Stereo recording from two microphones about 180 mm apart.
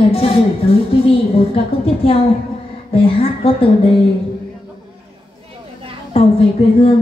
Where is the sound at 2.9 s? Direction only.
30° left (ahead or behind).